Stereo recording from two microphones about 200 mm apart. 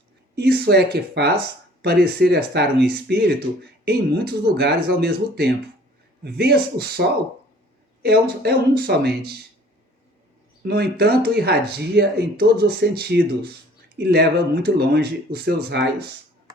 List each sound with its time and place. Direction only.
0.3 s speech: 50° right (ahead or behind)
10.6 s speech: 55° right (ahead or behind)